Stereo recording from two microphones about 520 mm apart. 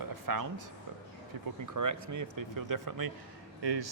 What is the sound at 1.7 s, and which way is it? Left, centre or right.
Speech, right.